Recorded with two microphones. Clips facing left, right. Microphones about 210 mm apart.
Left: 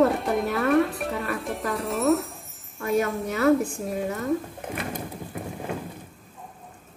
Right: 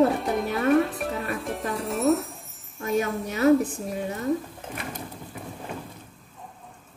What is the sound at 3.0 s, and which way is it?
Speech, 20° right (ahead or behind).